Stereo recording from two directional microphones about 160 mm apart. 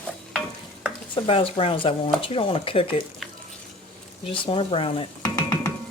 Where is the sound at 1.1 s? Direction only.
35° left (ahead or behind).